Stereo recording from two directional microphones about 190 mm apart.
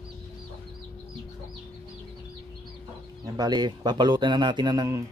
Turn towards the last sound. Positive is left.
turn(degrees=-20)  # may be behind; listen again after turning